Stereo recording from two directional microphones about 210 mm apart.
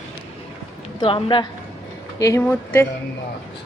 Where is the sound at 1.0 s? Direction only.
25° left (ahead or behind).